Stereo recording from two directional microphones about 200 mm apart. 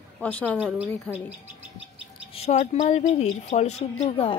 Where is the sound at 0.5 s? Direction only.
5° right (ahead or behind).